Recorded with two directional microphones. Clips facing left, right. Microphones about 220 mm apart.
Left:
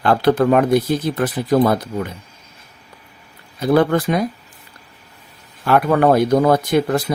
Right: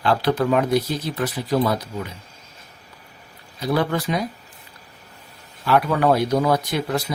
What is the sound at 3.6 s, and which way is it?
Speech, 55° left (ahead or behind).